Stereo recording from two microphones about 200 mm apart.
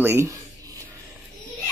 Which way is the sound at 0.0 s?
10° right (ahead or behind).